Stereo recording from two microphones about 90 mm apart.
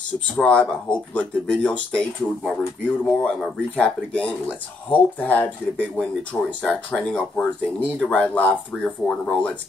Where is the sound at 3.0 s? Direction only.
5° left (ahead or behind).